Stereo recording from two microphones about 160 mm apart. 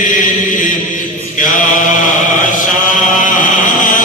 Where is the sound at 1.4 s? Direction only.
55° left (ahead or behind).